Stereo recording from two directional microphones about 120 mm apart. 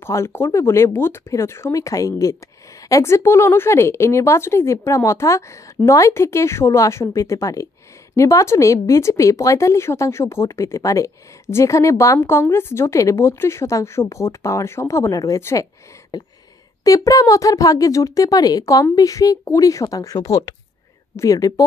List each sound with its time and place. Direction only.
0.0 s speech: 20° left (ahead or behind)
16.1 s a sound: 30° left (ahead or behind)
16.8 s speech: 30° left (ahead or behind)